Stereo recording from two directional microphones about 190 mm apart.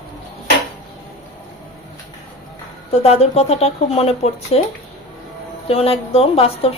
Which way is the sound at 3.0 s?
35° left (ahead or behind).